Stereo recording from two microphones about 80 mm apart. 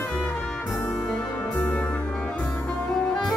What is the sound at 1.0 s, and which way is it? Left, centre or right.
Music, centre.